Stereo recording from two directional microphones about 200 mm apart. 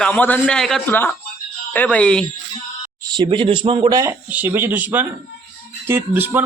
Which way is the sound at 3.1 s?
25° right (ahead or behind).